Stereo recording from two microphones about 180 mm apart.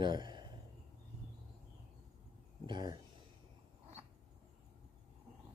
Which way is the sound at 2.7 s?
25° right (ahead or behind).